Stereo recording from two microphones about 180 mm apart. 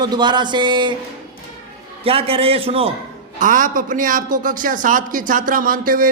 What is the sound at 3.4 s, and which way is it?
A man's voice, 45° right (ahead or behind).